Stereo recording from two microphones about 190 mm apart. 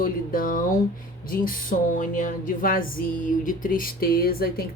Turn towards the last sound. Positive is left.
turn(degrees=55)  # may be behind; listen again after turning